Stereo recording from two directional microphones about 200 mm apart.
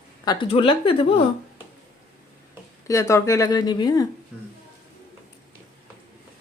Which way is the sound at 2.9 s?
15° left (ahead or behind).